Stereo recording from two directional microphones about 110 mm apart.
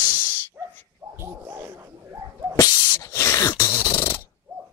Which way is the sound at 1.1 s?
20° right (ahead or behind).